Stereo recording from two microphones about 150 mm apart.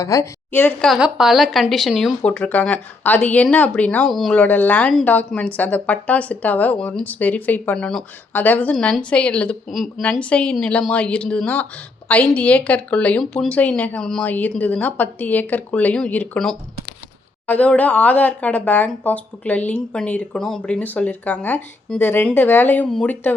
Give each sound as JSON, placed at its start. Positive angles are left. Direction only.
{"t": 0.0, "sound": "speech", "side_deg": 20}
{"t": 0.9, "sound": "a woman's voice", "side_deg": -5}